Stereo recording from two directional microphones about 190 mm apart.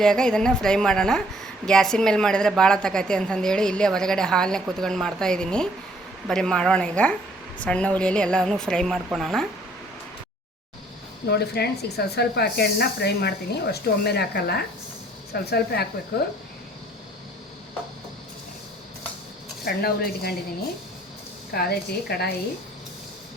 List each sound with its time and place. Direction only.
0.0 s a woman's voice: 5° left (ahead or behind)
11.3 s speech: 60° left (ahead or behind)
19.6 s speech: 55° left (ahead or behind)
21.5 s speech: 55° left (ahead or behind)